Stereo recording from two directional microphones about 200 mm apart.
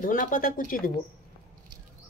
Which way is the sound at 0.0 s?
40° left (ahead or behind).